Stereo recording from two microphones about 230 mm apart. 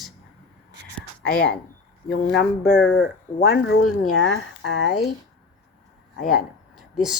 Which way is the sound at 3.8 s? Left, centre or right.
Left.